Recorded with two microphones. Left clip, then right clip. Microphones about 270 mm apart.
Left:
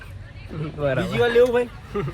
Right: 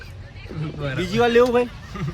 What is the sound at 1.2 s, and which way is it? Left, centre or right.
Speech, right.